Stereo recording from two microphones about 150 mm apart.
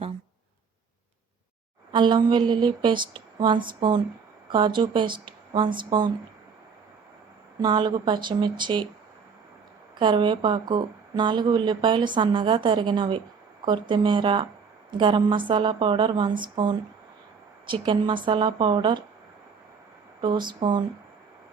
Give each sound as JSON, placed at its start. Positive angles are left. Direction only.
{"t": 1.9, "sound": "speech", "side_deg": -30}
{"t": 7.6, "sound": "speech", "side_deg": -30}
{"t": 10.0, "sound": "speech", "side_deg": -35}
{"t": 17.8, "sound": "speech", "side_deg": -35}
{"t": 20.2, "sound": "speech", "side_deg": -30}